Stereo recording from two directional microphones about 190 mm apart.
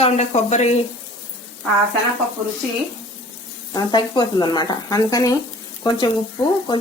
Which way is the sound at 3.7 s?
20° left (ahead or behind).